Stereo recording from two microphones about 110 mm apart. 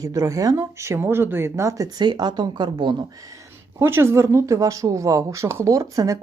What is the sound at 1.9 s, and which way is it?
Speech, 40° right (ahead or behind).